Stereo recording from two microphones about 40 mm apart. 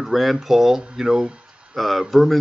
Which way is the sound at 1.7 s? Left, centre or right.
Centre.